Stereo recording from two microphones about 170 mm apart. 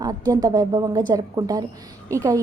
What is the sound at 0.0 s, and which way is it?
A woman's voice, 20° right (ahead or behind).